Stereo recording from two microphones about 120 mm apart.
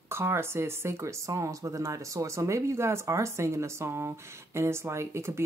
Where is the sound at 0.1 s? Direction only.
20° right (ahead or behind).